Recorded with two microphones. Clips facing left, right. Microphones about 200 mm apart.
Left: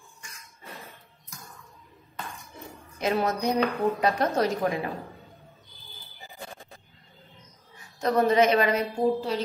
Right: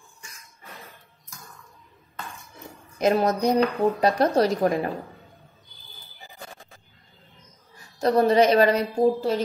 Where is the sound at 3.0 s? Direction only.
40° right (ahead or behind).